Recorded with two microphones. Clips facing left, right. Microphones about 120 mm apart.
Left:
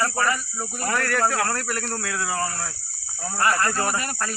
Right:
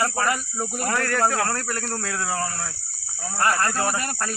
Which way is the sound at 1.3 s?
5° right (ahead or behind).